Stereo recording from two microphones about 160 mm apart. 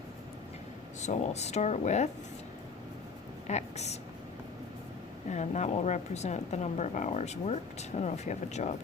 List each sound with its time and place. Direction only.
1.0 s speech: 45° left (ahead or behind)
3.4 s a woman's voice: 45° left (ahead or behind)
5.3 s speech: 50° left (ahead or behind)